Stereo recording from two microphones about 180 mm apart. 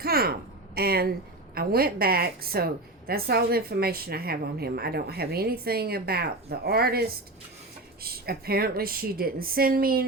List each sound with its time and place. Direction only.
0.0 s speech: 55° right (ahead or behind)